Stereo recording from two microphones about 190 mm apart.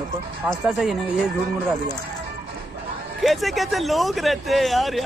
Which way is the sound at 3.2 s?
Centre (ahead or behind).